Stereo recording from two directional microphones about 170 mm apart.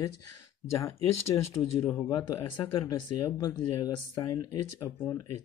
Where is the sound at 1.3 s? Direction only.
25° left (ahead or behind).